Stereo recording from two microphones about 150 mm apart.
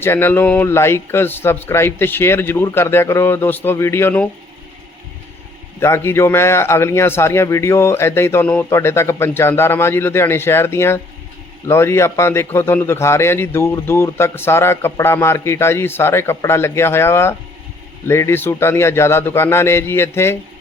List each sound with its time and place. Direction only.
0.0 s a man's voice: 15° left (ahead or behind)
5.8 s a man's voice: 15° left (ahead or behind)